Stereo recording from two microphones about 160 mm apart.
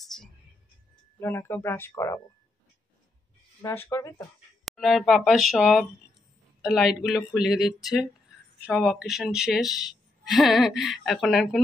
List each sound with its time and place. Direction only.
0.0 s music: centre (ahead or behind)
1.2 s speech: 15° left (ahead or behind)
3.6 s speech: 15° left (ahead or behind)
4.6 s a woman's voice: centre (ahead or behind)